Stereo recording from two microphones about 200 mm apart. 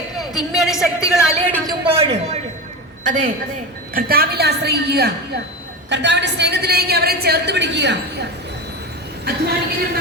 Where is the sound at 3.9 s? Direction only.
50° right (ahead or behind).